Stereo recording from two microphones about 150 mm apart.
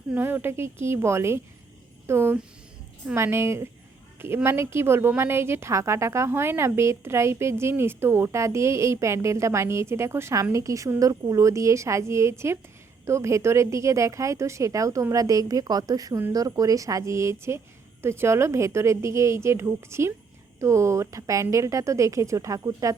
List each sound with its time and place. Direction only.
0.1 s a woman's voice: 15° right (ahead or behind)